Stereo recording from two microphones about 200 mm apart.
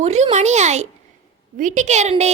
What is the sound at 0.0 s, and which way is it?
A woman's voice, 35° right (ahead or behind).